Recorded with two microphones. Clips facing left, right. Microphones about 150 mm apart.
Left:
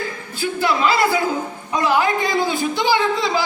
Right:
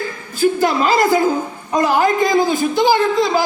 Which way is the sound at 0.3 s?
45° right (ahead or behind).